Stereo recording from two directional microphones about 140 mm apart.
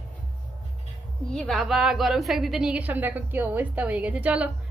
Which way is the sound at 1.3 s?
Centre (ahead or behind).